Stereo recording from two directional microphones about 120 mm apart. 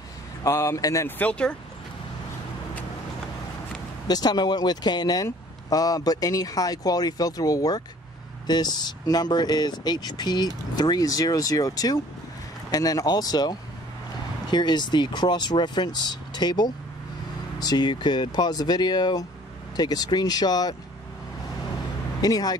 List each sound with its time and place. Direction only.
0.4 s speech: 25° left (ahead or behind)
1.0 s speech: 15° left (ahead or behind)
4.1 s speech: 35° left (ahead or behind)
22.2 s speech: 35° left (ahead or behind)